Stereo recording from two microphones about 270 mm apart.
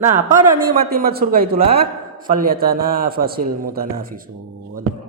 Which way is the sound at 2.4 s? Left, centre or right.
Right.